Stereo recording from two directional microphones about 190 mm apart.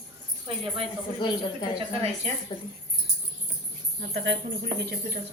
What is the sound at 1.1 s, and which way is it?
Speech, 25° left (ahead or behind).